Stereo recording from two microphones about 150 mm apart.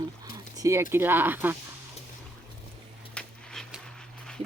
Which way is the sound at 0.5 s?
20° right (ahead or behind).